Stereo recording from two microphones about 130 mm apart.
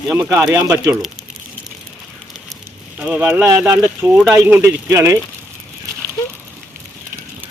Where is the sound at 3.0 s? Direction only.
10° right (ahead or behind).